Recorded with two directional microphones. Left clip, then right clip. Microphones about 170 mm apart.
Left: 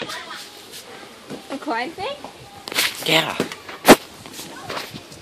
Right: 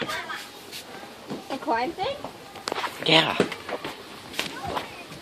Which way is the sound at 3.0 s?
Centre (ahead or behind).